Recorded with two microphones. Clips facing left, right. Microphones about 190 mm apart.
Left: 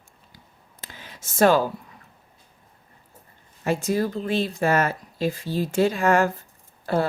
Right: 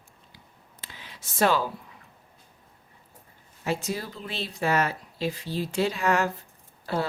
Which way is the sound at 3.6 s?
50° left (ahead or behind).